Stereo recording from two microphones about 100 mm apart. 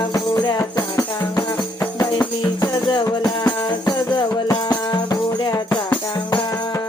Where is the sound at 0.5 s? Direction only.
35° left (ahead or behind).